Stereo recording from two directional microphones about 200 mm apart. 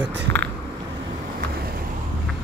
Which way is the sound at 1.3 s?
45° right (ahead or behind).